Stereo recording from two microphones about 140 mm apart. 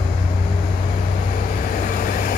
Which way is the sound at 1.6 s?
75° left (ahead or behind).